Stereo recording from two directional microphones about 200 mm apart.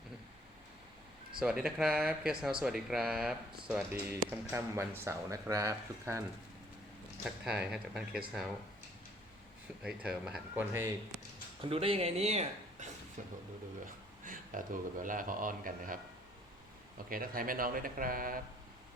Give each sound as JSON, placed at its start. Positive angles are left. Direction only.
{"t": 1.4, "sound": "speech", "side_deg": -5}
{"t": 7.3, "sound": "speech", "side_deg": -5}
{"t": 9.8, "sound": "speech", "side_deg": -5}
{"t": 11.6, "sound": "speech", "side_deg": -30}
{"t": 17.1, "sound": "speech", "side_deg": -45}